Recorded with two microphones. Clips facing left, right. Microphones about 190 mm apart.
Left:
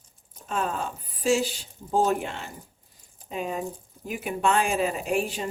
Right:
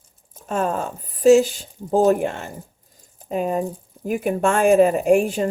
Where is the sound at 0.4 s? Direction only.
45° right (ahead or behind).